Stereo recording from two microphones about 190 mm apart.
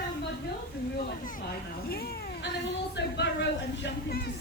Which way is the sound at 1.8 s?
55° left (ahead or behind).